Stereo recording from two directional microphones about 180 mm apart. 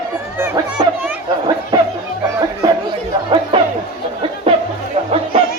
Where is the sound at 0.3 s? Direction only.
15° right (ahead or behind).